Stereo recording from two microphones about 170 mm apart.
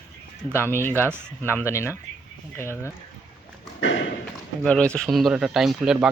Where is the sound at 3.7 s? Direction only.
90° left.